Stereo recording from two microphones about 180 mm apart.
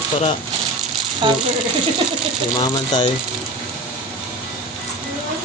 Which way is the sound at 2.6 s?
25° left (ahead or behind).